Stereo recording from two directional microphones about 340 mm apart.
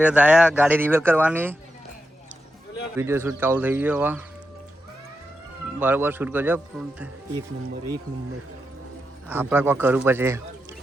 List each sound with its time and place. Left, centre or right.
0.0 s speech: centre
3.0 s speech: centre
5.8 s speech: centre
9.2 s speech: centre